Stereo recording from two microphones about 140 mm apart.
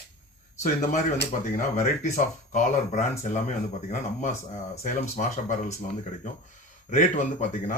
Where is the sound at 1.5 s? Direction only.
65° left (ahead or behind).